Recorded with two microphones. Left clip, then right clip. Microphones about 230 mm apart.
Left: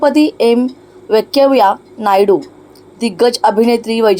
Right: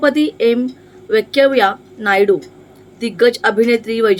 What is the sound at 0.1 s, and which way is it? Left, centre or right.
A woman's voice, left.